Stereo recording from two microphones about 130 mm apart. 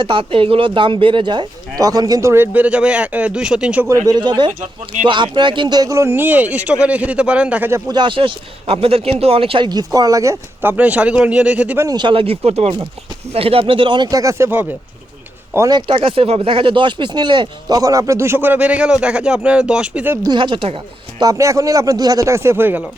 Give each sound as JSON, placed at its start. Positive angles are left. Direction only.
{"t": 0.0, "sound": "speech", "side_deg": -40}
{"t": 3.8, "sound": "a man's voice", "side_deg": -25}
{"t": 7.9, "sound": "speech", "side_deg": -35}
{"t": 11.9, "sound": "speech", "side_deg": -35}
{"t": 15.9, "sound": "speech", "side_deg": -45}
{"t": 20.2, "sound": "speech", "side_deg": -35}
{"t": 21.2, "sound": "speech", "side_deg": -25}